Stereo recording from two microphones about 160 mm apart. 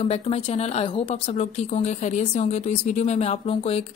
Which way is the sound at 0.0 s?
40° left (ahead or behind).